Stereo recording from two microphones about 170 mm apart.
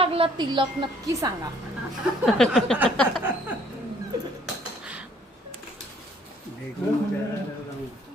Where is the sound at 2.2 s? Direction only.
Centre (ahead or behind).